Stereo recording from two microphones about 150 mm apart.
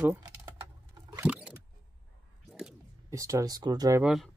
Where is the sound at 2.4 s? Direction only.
Centre (ahead or behind).